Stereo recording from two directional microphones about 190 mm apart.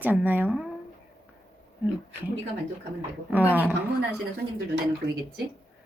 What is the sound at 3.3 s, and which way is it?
Speech, 10° right (ahead or behind).